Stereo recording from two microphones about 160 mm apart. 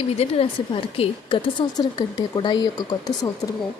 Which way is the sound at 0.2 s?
35° left (ahead or behind).